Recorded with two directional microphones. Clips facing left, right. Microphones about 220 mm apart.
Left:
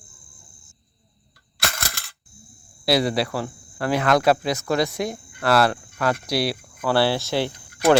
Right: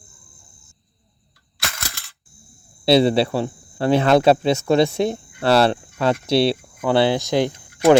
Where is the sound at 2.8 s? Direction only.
25° right (ahead or behind).